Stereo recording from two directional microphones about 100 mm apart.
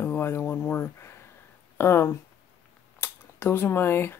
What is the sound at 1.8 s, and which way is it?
Speech, 25° left (ahead or behind).